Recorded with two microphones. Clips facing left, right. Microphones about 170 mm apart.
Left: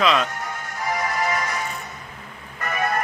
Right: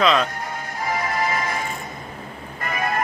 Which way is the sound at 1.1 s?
45° left (ahead or behind).